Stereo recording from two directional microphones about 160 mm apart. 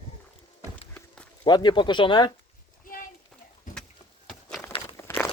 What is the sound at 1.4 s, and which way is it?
Speech, 30° left (ahead or behind).